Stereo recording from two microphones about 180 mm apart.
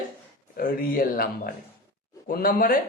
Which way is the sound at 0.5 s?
55° left (ahead or behind).